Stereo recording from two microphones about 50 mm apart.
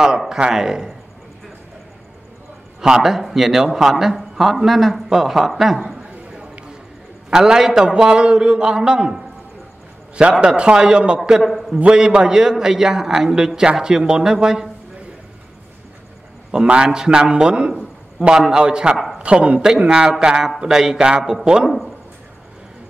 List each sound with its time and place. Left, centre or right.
0.3 s a man's voice: centre
2.8 s speech: centre
5.9 s a sound: right
7.2 s a man's voice: centre
10.4 s a man's voice: right
11.4 s speech: centre
11.9 s a man's voice: centre
16.5 s a man's voice: centre